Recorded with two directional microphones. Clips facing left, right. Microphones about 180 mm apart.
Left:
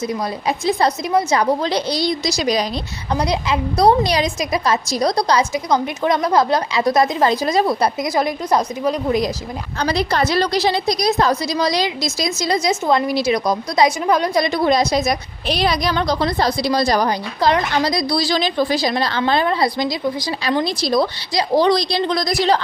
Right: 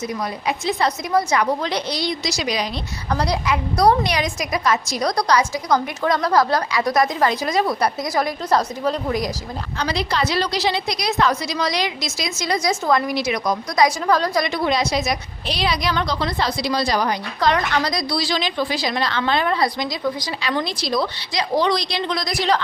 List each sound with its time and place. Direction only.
0.1 s a woman's voice: 35° left (ahead or behind)
3.1 s a woman's voice: 20° left (ahead or behind)
9.7 s a woman's voice: 45° left (ahead or behind)
13.8 s a woman's voice: 20° left (ahead or behind)
14.4 s a woman's voice: 35° left (ahead or behind)